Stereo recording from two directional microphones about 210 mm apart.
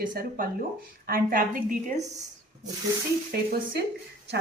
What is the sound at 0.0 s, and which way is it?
Speech, 40° right (ahead or behind).